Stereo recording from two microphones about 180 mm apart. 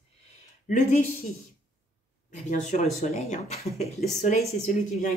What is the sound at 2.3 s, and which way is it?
Speech, 40° left (ahead or behind).